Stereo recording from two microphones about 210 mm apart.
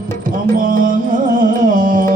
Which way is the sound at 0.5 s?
40° right (ahead or behind).